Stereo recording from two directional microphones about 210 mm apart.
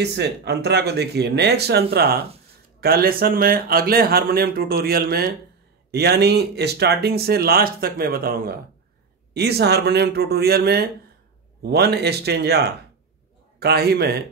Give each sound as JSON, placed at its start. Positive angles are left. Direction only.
{"t": 0.0, "sound": "speech", "side_deg": -55}